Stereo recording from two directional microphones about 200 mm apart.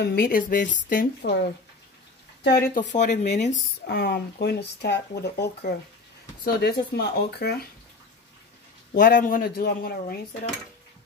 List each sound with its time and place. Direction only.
0.0 s speech: 50° left (ahead or behind)
2.4 s speech: 50° left (ahead or behind); by 3.5 s 35° left (ahead or behind)
3.8 s speech: 50° left (ahead or behind)
9.0 s speech: 45° left (ahead or behind)